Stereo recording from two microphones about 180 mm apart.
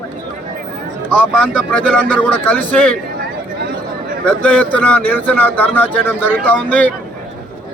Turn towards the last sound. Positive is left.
turn(degrees=10)  # may be behind; listen again after turning